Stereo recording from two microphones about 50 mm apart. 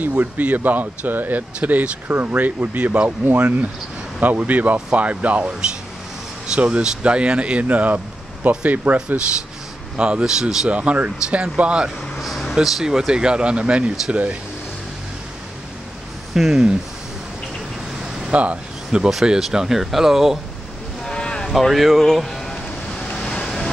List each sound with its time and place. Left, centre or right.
0.0 s speech: right
9.9 s speech: right
10.7 s speech: right
12.2 s air conditioning: centre
12.6 s speech: centre; by 13.9 s right
16.3 s speech: centre
18.3 s speech: right
18.9 s speech: centre
21.0 s boat: centre
21.5 s a sound: centre
23.1 s waves: centre
23.4 s a sound: centre